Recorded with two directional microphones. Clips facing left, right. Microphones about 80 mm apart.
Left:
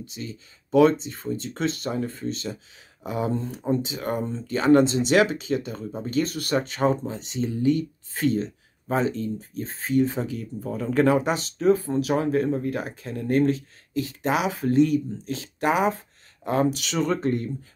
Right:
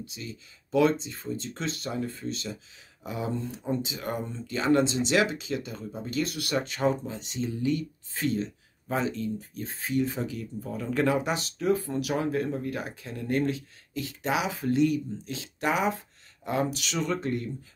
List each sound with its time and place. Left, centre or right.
0.1 s speech: left